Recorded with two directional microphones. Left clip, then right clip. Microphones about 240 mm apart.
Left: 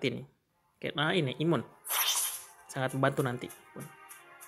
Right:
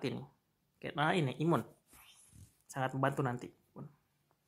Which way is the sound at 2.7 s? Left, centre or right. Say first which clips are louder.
Left 5 dB; centre.